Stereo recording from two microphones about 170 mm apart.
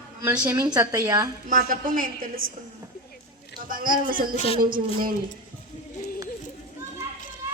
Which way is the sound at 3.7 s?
55° right (ahead or behind).